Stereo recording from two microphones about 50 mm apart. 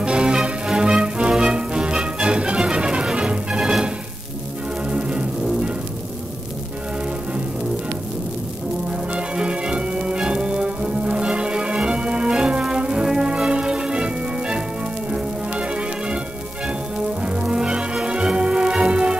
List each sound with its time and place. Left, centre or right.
0.0 s music: centre
4.8 s music: centre
9.1 s brass instrument: right
12.6 s music: centre
17.2 s music: centre